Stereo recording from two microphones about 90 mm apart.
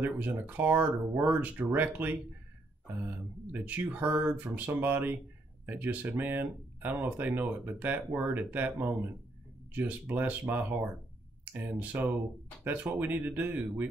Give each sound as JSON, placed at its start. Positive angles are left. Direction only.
{"t": 0.0, "sound": "speech", "side_deg": -20}